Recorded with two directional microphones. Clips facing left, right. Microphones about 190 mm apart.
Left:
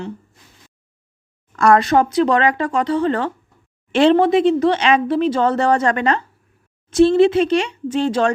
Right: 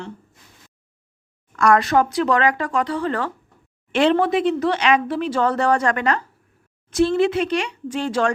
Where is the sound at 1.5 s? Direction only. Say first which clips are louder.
Left 3 dB; 30° left (ahead or behind).